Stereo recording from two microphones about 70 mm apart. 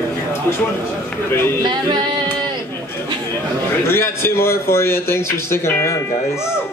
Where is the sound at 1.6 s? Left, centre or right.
Right.